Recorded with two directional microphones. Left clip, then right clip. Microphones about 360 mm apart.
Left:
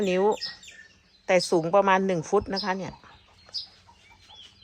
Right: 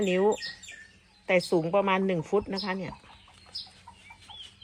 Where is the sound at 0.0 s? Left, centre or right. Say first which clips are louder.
Left 2 dB; centre.